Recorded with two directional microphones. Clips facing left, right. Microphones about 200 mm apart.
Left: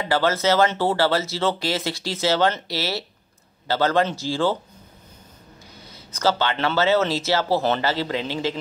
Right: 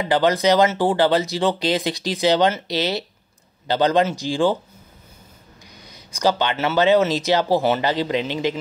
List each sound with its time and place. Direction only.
0.0 s speech: 15° right (ahead or behind)
5.9 s speech: 15° right (ahead or behind)